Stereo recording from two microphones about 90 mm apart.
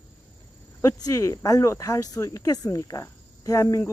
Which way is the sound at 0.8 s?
40° left (ahead or behind).